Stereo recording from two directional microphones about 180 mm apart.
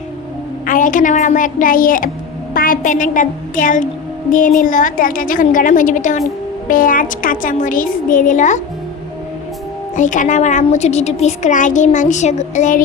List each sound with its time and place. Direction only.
0.6 s a child's voice: 50° left (ahead or behind)
9.9 s a child's voice: 45° left (ahead or behind)